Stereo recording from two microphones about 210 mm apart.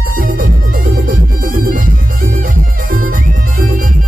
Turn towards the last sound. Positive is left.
turn(degrees=-40)  # may be behind; listen again after turning